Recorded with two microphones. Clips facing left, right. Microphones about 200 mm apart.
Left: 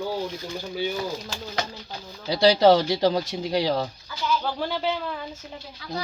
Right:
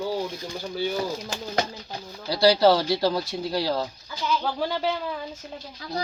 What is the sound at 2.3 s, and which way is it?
Speech, 20° left (ahead or behind).